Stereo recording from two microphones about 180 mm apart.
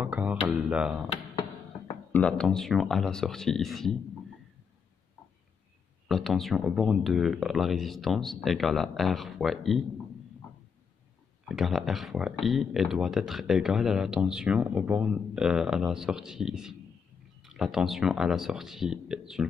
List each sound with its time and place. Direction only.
0.0 s a sound: 10° right (ahead or behind)
2.1 s speech: 5° left (ahead or behind)
6.0 s speech: centre (ahead or behind)
11.4 s speech: centre (ahead or behind)